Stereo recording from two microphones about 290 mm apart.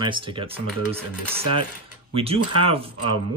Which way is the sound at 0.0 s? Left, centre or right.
Centre.